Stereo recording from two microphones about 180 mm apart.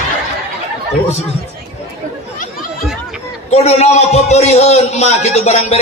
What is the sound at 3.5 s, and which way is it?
A man's voice, 35° left (ahead or behind).